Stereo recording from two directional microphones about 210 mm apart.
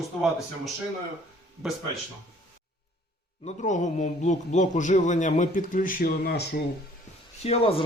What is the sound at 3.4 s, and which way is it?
A man's voice, 35° left (ahead or behind).